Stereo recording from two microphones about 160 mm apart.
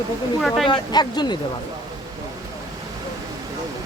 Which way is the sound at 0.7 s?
25° left (ahead or behind).